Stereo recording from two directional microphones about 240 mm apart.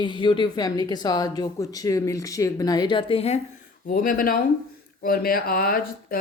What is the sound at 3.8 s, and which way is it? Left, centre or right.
Speech, left.